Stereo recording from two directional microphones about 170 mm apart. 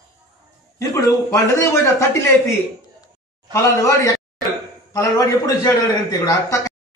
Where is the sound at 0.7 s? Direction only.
20° left (ahead or behind).